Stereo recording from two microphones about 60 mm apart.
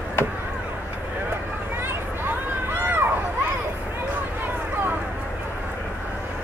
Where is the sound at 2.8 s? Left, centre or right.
Right.